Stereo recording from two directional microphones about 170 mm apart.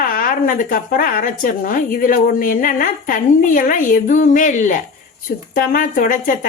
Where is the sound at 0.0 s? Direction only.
55° left (ahead or behind).